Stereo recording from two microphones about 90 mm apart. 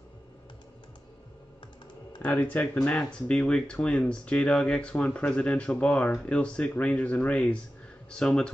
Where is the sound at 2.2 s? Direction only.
20° left (ahead or behind).